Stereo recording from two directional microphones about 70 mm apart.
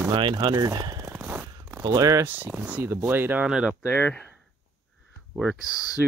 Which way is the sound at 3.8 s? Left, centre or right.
Left.